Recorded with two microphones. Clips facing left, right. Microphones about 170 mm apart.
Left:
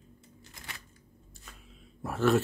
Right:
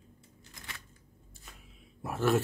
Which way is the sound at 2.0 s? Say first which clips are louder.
Left 2 dB; 10° right (ahead or behind).